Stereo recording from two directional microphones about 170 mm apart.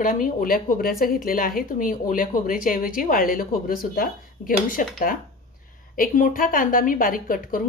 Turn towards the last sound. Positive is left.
turn(degrees=55)  # may be behind; listen again after turning